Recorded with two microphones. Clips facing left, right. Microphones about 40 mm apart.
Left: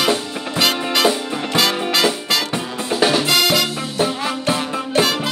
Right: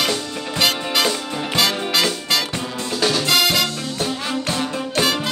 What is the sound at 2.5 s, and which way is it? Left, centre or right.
Music, centre.